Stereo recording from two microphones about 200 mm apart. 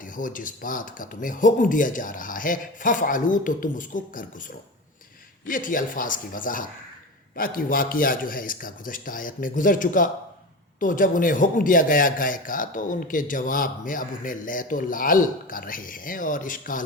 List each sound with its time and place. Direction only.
0.0 s speech: 40° left (ahead or behind)
5.5 s speech: 40° left (ahead or behind)